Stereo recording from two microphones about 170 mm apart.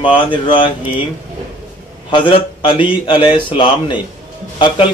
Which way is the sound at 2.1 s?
30° left (ahead or behind).